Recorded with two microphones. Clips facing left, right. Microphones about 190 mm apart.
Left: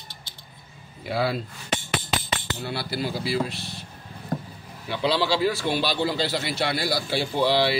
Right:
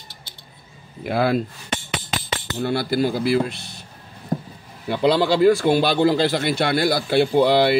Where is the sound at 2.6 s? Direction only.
50° right (ahead or behind).